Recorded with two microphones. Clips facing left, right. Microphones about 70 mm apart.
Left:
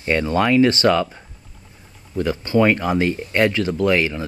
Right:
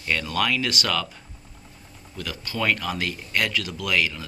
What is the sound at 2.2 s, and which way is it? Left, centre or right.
Speech, left.